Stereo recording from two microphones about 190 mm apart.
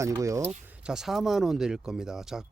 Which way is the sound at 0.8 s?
Centre (ahead or behind).